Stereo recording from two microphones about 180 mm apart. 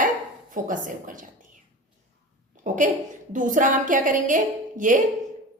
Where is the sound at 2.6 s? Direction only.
45° right (ahead or behind).